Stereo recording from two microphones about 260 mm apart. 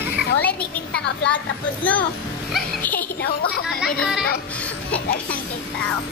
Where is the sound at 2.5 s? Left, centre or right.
Centre.